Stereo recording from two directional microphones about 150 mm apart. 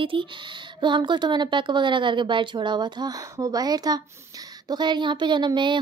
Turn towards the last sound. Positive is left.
turn(degrees=-30)  # may be behind; listen again after turning